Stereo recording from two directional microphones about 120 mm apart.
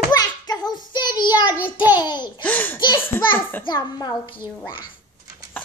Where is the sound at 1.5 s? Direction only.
15° right (ahead or behind).